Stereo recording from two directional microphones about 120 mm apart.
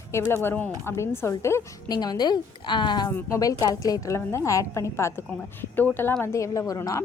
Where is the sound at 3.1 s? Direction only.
25° left (ahead or behind).